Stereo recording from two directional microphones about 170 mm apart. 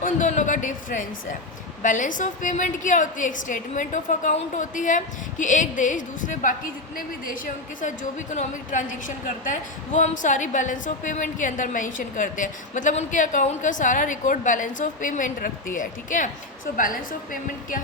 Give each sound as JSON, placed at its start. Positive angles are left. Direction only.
{"t": 0.0, "sound": "a woman's voice", "side_deg": 45}